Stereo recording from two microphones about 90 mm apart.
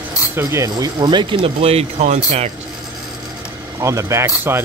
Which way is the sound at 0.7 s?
55° right (ahead or behind).